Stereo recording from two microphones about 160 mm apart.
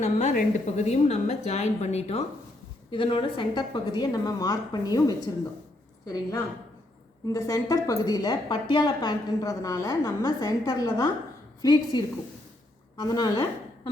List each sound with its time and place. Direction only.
0.0 s a woman's voice: 45° left (ahead or behind); by 13.4 s 25° left (ahead or behind)